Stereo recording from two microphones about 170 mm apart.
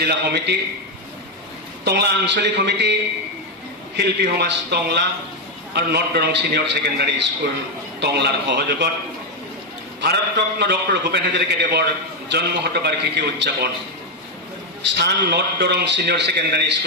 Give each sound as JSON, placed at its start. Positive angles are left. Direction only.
{"t": 0.0, "sound": "a man's voice", "side_deg": -75}
{"t": 1.9, "sound": "a man's voice", "side_deg": -75}
{"t": 10.0, "sound": "a man's voice", "side_deg": -75}
{"t": 15.0, "sound": "a man's voice", "side_deg": -80}